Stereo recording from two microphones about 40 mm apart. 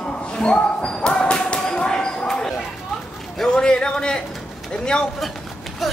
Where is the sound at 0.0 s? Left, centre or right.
Left.